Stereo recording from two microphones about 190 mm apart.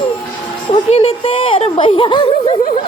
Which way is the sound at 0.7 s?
30° left (ahead or behind).